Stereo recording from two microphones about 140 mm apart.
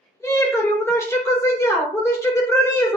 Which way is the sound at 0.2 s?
20° left (ahead or behind).